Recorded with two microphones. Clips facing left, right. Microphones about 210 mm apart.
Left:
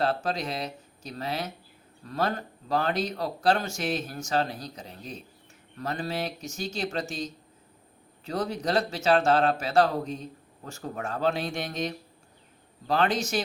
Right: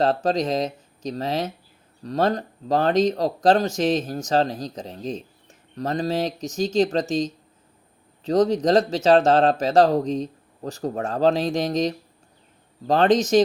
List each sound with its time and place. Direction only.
0.0 s speech: 40° right (ahead or behind)
8.2 s speech: 40° right (ahead or behind)